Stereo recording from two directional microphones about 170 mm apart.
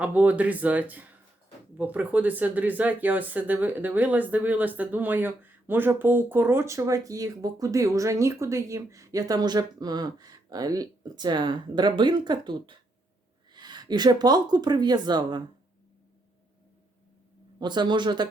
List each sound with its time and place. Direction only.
0.0 s speech: 10° right (ahead or behind); by 15.4 s 25° right (ahead or behind)
17.6 s speech: 25° right (ahead or behind)